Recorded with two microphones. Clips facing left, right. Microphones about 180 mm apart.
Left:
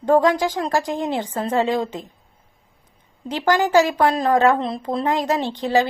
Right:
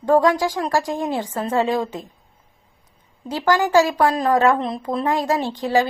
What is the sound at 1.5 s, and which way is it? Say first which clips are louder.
Speech: even; 35° left (ahead or behind).